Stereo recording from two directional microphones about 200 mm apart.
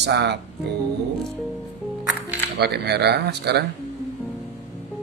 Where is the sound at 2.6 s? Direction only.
55° right (ahead or behind).